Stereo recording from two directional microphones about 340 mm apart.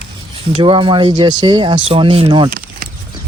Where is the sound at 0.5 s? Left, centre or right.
Centre.